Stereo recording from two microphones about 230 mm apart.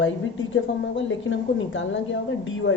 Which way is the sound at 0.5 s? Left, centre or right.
Left.